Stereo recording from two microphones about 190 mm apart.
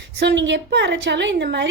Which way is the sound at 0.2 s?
70° right (ahead or behind).